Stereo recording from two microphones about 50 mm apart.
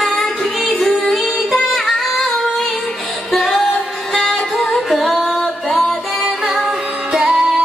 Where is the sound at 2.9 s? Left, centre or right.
Centre.